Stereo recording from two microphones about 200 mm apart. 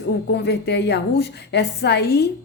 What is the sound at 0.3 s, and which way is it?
A woman's voice, 55° left (ahead or behind).